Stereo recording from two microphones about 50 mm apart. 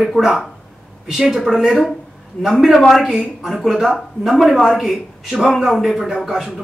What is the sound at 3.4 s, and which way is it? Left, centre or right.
A man's voice, centre.